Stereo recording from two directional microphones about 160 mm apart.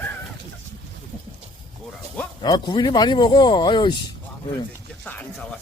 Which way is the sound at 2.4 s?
25° left (ahead or behind).